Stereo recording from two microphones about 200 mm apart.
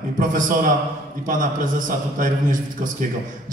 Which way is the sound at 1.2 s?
40° right (ahead or behind).